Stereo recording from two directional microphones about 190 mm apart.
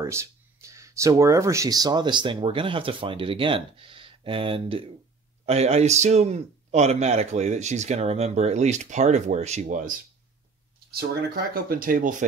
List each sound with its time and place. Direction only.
0.0 s a man's voice: 15° right (ahead or behind); by 9.9 s 40° right (ahead or behind)
11.5 s speech: 50° right (ahead or behind)